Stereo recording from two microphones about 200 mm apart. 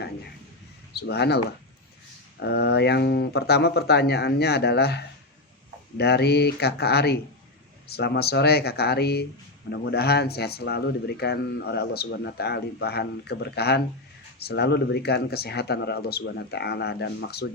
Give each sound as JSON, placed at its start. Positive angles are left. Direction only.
{"t": 0.9, "sound": "speech", "side_deg": 55}
{"t": 2.4, "sound": "speech", "side_deg": 55}